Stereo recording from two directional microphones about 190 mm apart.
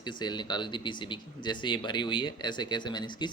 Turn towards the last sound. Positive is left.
turn(degrees=25)  # may be behind; listen again after turning